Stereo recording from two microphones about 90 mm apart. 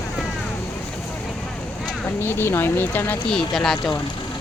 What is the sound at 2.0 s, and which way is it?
Speech, 25° left (ahead or behind).